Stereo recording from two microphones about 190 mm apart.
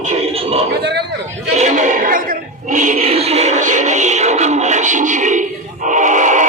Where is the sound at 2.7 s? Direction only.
40° right (ahead or behind).